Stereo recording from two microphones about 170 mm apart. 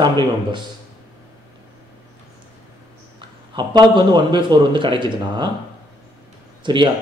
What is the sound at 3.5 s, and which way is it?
A man's voice, 25° right (ahead or behind).